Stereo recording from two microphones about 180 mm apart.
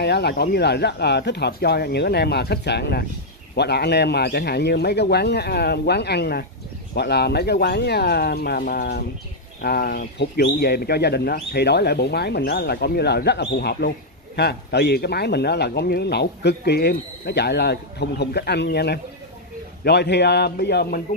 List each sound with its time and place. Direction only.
0.0 s speech: 65° left (ahead or behind)